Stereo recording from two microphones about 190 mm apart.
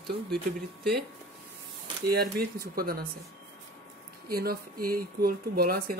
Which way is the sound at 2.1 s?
55° right (ahead or behind).